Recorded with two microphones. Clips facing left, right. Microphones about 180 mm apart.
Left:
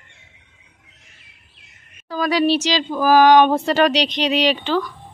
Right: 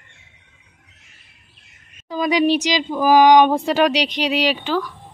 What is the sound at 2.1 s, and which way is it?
Speech, 20° right (ahead or behind).